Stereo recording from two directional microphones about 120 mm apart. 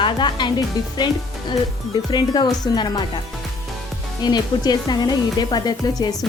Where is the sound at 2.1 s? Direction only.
35° left (ahead or behind).